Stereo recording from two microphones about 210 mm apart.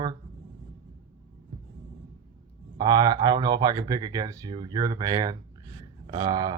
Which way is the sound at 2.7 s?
20° right (ahead or behind).